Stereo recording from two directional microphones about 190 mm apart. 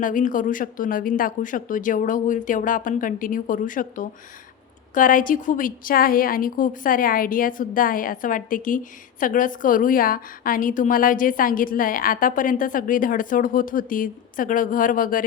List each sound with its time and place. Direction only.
0.0 s a woman's voice: 45° left (ahead or behind)